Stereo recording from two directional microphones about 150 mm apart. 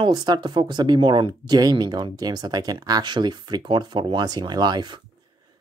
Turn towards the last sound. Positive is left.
turn(degrees=-30)  # may be behind; listen again after turning